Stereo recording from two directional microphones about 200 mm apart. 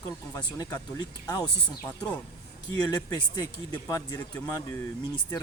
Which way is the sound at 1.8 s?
5° left (ahead or behind).